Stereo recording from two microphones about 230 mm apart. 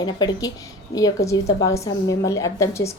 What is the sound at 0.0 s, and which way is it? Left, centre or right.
A woman's voice, centre.